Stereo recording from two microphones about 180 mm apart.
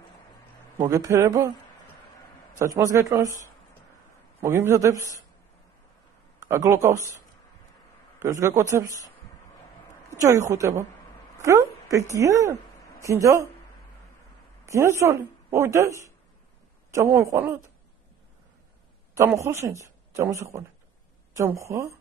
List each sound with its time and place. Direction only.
0.8 s a woman's voice: 20° right (ahead or behind)
2.6 s a woman's voice: 20° right (ahead or behind)
4.4 s a woman's voice: 15° right (ahead or behind)
6.4 s a woman's voice: 15° right (ahead or behind)
8.2 s a woman's voice: 15° right (ahead or behind)
10.1 s a woman's voice: 20° right (ahead or behind)
14.7 s a woman's voice: 15° right (ahead or behind)
19.1 s a woman's voice: 15° right (ahead or behind)